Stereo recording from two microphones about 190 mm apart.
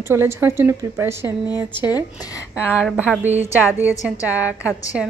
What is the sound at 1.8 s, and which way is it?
Speech, 20° left (ahead or behind).